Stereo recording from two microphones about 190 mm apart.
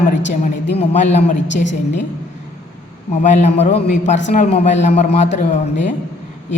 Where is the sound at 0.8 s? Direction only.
35° left (ahead or behind).